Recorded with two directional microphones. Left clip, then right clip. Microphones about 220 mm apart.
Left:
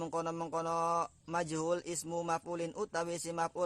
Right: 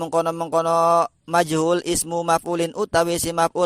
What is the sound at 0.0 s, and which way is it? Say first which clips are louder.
Speech: right 15 dB; 35° right (ahead or behind).